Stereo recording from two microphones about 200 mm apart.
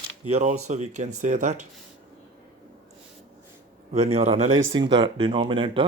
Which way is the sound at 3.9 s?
30° right (ahead or behind).